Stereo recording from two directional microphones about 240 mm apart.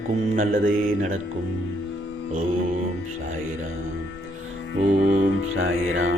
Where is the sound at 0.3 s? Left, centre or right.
Right.